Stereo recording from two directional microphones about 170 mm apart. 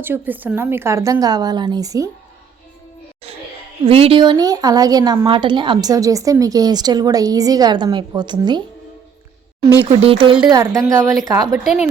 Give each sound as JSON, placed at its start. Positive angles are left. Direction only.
{"t": 0.0, "sound": "a woman's voice", "side_deg": -10}
{"t": 3.8, "sound": "a woman's voice", "side_deg": -35}
{"t": 10.0, "sound": "speech", "side_deg": -35}
{"t": 10.5, "sound": "a woman's voice", "side_deg": -20}
{"t": 11.5, "sound": "speech", "side_deg": -5}